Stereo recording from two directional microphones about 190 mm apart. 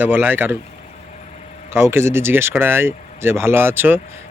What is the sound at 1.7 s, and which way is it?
Speech, 15° right (ahead or behind).